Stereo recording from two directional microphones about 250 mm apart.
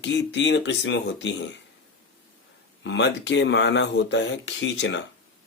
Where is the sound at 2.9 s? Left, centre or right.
Left.